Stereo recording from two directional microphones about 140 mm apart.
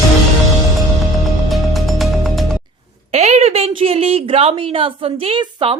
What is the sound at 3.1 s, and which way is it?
A woman's voice, 55° right (ahead or behind).